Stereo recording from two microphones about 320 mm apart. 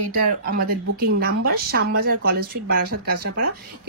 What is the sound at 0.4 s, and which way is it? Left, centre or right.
Speech, right.